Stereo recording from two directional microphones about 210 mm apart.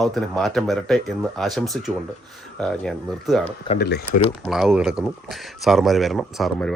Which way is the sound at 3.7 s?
50° left (ahead or behind).